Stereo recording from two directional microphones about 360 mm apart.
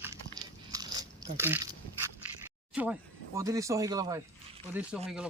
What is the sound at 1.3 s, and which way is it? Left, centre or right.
Speech, centre.